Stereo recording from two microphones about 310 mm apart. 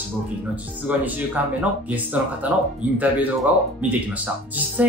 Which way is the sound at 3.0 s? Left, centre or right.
Centre.